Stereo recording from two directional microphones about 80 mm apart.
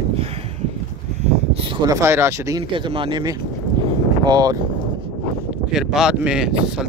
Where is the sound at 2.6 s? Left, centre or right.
Right.